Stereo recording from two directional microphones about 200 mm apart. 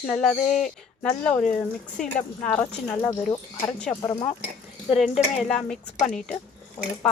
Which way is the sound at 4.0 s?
20° left (ahead or behind).